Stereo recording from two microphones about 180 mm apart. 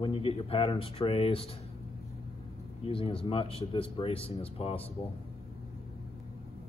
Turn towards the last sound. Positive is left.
turn(degrees=30)  # may be behind; listen again after turning